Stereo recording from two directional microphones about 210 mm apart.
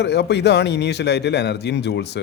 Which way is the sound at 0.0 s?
55° left (ahead or behind).